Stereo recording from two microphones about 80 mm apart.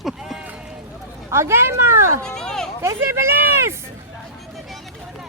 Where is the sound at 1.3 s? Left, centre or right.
Right.